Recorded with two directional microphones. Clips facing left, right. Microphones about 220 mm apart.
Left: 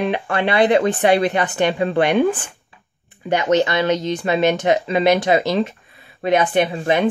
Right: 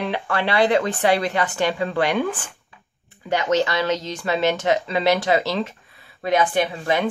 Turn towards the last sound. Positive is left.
turn(degrees=25)  # may be behind; listen again after turning